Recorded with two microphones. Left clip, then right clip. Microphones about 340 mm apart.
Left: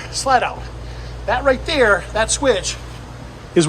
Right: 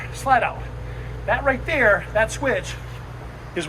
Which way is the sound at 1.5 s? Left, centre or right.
Centre.